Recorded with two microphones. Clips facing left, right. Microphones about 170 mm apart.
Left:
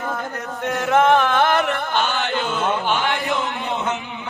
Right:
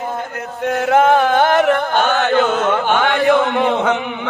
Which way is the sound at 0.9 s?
35° right (ahead or behind).